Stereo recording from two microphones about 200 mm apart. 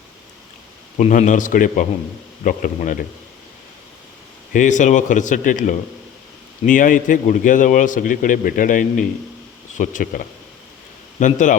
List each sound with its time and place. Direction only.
0.9 s a man's voice: 40° left (ahead or behind)
4.5 s a man's voice: 40° left (ahead or behind)
11.2 s a man's voice: 40° left (ahead or behind)